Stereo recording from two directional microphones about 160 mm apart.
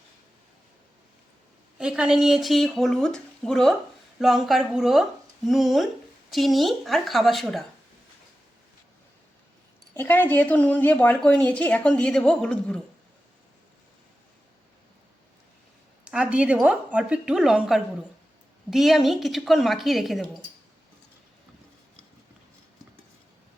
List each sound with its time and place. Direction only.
1.8 s speech: 5° right (ahead or behind)
9.9 s a woman's voice: 15° left (ahead or behind)
16.0 s speech: 5° right (ahead or behind)